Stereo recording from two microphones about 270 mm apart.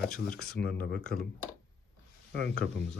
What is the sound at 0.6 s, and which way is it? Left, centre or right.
Speech, left.